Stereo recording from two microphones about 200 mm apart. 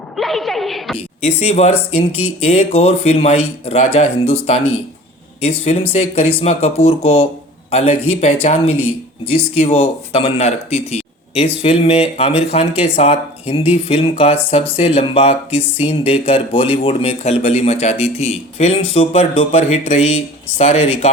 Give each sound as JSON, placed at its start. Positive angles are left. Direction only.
{"t": 0.2, "sound": "a woman's voice", "side_deg": 0}
{"t": 0.9, "sound": "speech", "side_deg": 30}
{"t": 5.4, "sound": "speech", "side_deg": 30}